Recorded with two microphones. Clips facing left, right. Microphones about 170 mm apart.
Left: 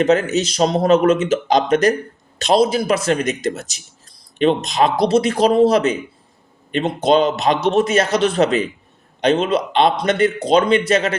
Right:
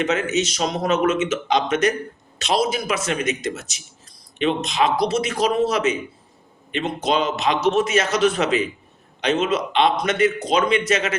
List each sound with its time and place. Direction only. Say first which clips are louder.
0.0 s speech: left 5 dB; 35° left (ahead or behind)